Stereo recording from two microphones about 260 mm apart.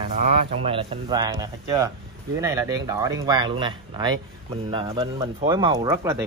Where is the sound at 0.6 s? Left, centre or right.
Right.